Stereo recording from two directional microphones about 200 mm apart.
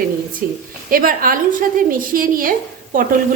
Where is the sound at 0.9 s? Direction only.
45° right (ahead or behind).